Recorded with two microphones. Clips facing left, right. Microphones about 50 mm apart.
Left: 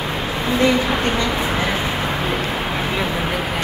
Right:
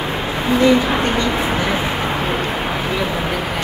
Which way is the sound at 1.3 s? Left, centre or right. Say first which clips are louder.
Right 2 dB; centre.